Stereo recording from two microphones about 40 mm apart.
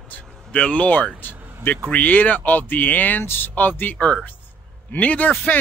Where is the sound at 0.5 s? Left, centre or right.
Left.